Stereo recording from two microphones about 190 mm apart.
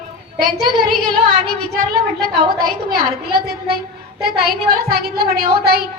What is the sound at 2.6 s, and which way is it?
Speech, 50° right (ahead or behind).